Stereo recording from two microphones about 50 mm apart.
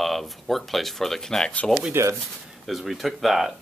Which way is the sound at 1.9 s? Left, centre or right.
Right.